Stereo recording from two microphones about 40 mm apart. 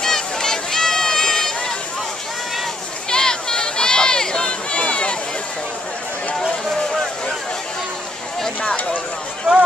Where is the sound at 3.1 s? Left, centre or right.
Centre.